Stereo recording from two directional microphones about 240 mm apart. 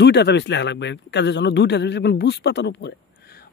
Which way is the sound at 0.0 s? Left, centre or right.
Left.